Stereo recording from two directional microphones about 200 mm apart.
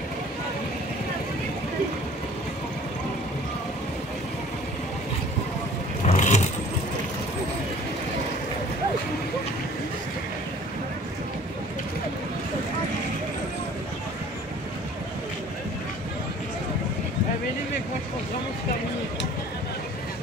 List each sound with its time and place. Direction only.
6.0 s vehicle: 35° left (ahead or behind)